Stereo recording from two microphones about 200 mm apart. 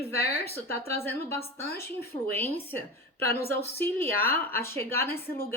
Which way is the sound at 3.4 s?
50° left (ahead or behind).